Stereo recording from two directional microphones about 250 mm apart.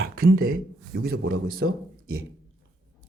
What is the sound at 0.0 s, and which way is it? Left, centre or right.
Speech, right.